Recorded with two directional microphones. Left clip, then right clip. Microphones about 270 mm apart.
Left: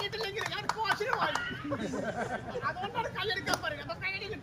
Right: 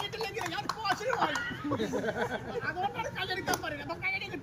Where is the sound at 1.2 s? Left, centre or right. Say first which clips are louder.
Right 1 dB; centre.